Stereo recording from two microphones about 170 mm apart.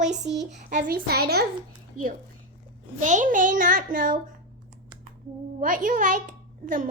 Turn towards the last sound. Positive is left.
turn(degrees=-50)  # may be behind; listen again after turning